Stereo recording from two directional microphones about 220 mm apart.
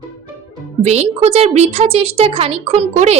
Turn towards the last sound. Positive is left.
turn(degrees=-30)  # may be behind; listen again after turning